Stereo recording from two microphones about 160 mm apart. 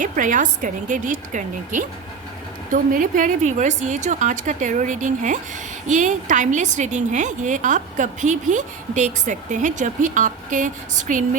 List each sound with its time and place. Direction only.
0.0 s a woman's voice: 55° right (ahead or behind)